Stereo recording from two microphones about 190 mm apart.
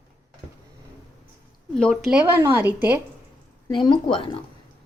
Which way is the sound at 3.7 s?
25° left (ahead or behind).